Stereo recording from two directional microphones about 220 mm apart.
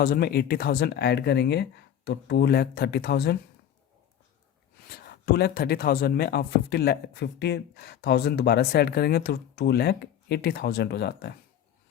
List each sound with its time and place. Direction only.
0.0 s speech: 45° left (ahead or behind)
4.9 s speech: 45° left (ahead or behind)